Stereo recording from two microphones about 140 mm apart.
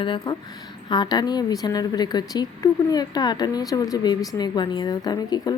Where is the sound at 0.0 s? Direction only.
35° left (ahead or behind).